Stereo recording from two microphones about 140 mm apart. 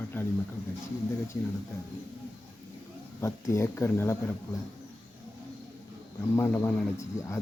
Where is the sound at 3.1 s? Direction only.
20° left (ahead or behind).